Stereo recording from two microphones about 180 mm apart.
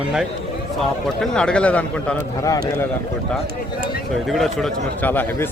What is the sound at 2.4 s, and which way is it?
Speech, 20° left (ahead or behind).